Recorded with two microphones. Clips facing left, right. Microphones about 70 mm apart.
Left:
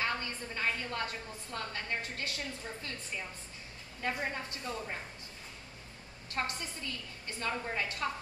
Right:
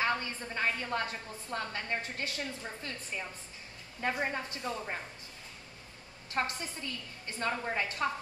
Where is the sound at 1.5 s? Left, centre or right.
Right.